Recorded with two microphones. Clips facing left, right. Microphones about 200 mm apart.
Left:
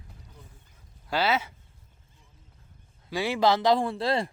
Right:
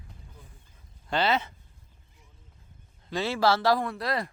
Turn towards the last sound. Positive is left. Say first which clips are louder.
# left 4 dB
turn(degrees=25)  # may be behind; listen again after turning